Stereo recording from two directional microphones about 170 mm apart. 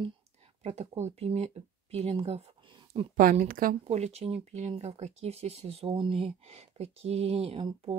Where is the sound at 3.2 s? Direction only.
55° right (ahead or behind).